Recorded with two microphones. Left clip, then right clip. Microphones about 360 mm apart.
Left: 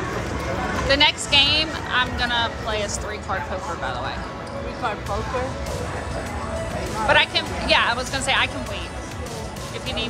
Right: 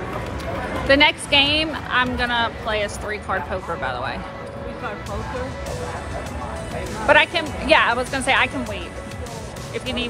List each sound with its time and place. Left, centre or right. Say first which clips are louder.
0.8 s speech: right 3 dB; centre
3.8 s a sound: right 2 dB; right
7.1 s speech: right 3 dB; centre